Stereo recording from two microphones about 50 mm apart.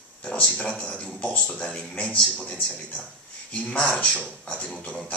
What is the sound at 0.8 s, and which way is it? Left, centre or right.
A man's voice, left.